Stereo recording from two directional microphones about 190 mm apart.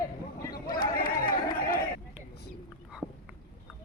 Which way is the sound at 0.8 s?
50° left (ahead or behind).